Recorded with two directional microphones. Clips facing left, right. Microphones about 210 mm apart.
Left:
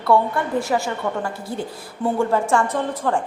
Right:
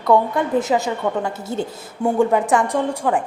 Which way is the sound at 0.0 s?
20° right (ahead or behind).